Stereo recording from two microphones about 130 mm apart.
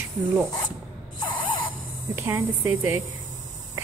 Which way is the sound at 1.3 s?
40° left (ahead or behind).